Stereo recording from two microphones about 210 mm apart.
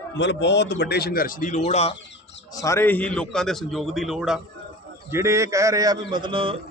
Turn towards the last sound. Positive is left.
turn(degrees=-25)  # may be behind; listen again after turning